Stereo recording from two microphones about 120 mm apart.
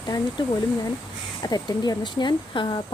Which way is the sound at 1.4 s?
35° left (ahead or behind).